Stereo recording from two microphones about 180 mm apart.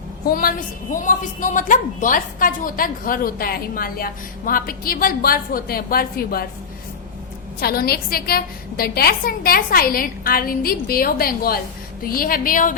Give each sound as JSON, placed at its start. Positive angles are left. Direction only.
{"t": 0.3, "sound": "a woman's voice", "side_deg": 50}
{"t": 7.6, "sound": "a woman's voice", "side_deg": 55}